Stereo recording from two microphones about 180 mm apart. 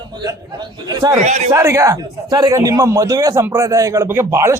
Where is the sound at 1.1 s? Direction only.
40° right (ahead or behind).